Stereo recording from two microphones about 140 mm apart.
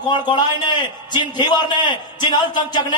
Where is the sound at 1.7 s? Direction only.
30° left (ahead or behind).